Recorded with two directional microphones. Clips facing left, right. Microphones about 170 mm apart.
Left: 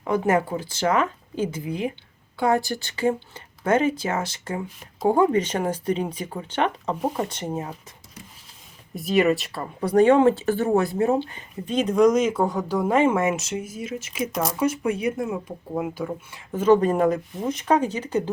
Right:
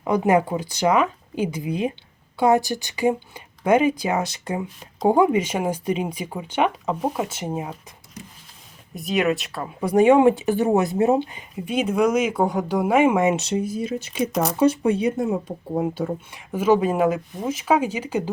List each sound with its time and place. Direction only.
0.1 s speech: 15° right (ahead or behind)
9.0 s speech: centre (ahead or behind)
9.8 s speech: 10° right (ahead or behind)
13.3 s speech: 30° right (ahead or behind)
16.5 s speech: 10° right (ahead or behind)